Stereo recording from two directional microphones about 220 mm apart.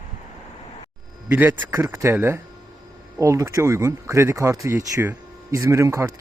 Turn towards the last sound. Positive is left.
turn(degrees=-15)  # may be behind; listen again after turning